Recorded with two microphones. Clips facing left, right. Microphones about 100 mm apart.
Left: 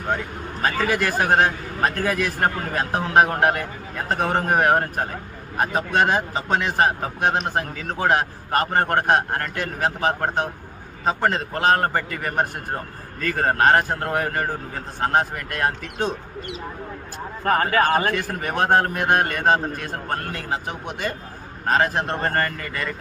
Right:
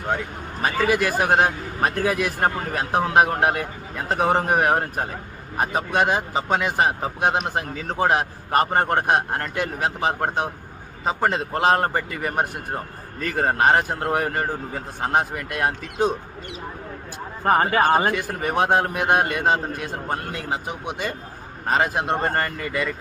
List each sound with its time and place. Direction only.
0.6 s speech: 15° right (ahead or behind)
15.0 s speech: 15° right (ahead or behind)
17.4 s speech: 20° right (ahead or behind)